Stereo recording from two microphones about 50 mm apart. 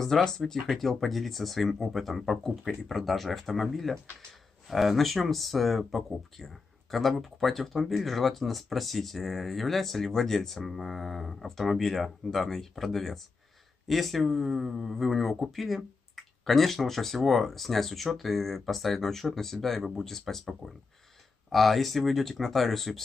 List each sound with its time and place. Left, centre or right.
0.0 s speech: centre